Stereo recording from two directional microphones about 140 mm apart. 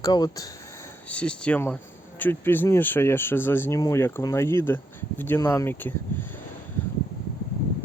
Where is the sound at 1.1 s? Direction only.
10° left (ahead or behind).